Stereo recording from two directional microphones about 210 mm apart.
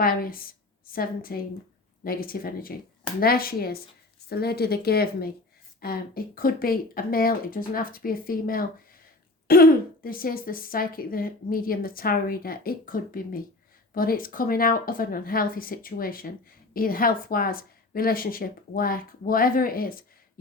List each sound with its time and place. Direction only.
0.0 s speech: 45° left (ahead or behind)